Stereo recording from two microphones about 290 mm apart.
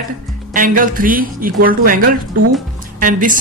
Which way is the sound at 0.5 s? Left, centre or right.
Right.